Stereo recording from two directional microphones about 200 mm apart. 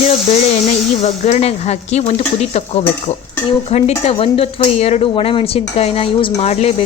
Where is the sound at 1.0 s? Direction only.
35° left (ahead or behind).